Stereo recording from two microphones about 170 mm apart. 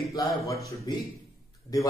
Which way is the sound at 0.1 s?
20° left (ahead or behind).